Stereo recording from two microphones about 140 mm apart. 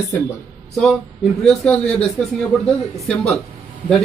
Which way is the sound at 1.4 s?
5° left (ahead or behind).